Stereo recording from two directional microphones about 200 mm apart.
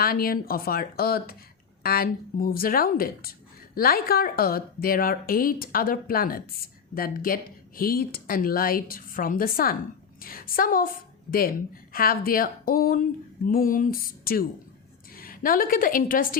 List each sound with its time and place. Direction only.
0.0 s a woman's voice: 50° left (ahead or behind)